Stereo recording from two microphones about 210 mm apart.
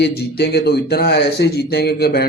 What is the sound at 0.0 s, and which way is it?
Speech, 50° left (ahead or behind).